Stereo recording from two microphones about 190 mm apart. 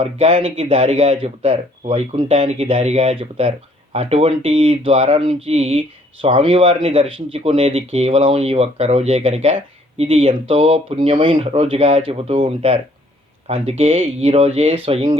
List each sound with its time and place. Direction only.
0.0 s speech: 30° right (ahead or behind)